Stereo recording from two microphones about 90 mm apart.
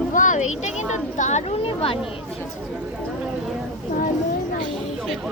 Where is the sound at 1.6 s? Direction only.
90° left.